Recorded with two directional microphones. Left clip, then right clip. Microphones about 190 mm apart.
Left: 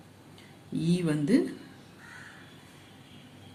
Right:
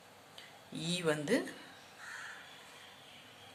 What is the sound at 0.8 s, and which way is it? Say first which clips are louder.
Speech: left 4 dB; 25° right (ahead or behind).